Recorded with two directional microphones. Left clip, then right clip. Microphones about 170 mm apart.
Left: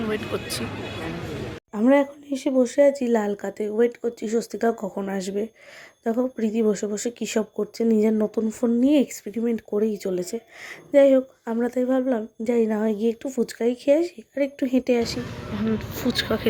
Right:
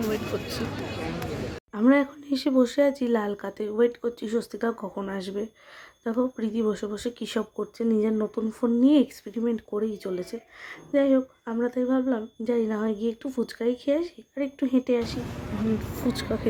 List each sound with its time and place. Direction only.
0.1 s speech: centre (ahead or behind)
1.8 s speech: 5° left (ahead or behind)
16.0 s speech: 5° left (ahead or behind)